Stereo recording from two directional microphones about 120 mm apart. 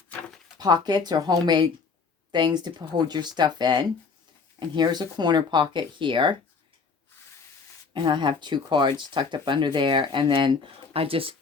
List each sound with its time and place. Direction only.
0.6 s speech: 35° right (ahead or behind)
7.9 s speech: 40° right (ahead or behind)